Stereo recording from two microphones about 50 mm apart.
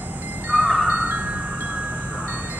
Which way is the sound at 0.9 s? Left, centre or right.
Right.